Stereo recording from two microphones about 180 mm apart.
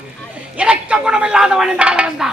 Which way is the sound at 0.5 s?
5° right (ahead or behind).